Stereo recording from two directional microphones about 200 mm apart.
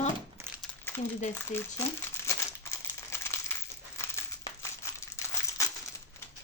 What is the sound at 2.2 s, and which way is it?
Crumpling, 15° left (ahead or behind).